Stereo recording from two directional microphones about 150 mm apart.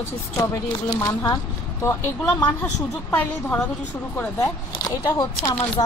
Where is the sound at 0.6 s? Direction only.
30° left (ahead or behind).